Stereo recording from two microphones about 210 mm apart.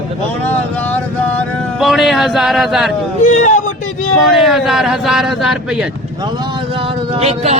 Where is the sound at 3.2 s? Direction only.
35° left (ahead or behind).